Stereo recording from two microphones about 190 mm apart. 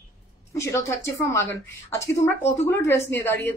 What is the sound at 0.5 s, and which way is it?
A woman's voice, 15° left (ahead or behind).